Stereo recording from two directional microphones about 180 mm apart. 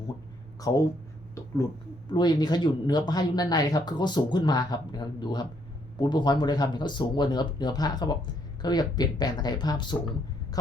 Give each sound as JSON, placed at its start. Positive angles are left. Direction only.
{"t": 0.7, "sound": "speech", "side_deg": 20}
{"t": 2.1, "sound": "speech", "side_deg": 25}